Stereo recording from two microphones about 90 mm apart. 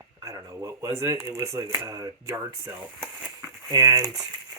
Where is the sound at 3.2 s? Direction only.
15° right (ahead or behind).